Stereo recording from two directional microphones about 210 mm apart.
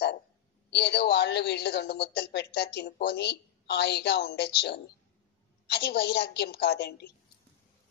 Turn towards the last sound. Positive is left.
turn(degrees=50)  # may be behind; listen again after turning